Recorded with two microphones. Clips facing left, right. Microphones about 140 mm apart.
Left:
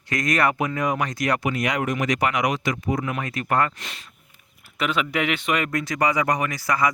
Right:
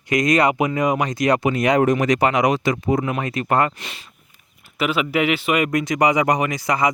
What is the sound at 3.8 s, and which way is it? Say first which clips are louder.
Speech: right 2 dB; 5° right (ahead or behind).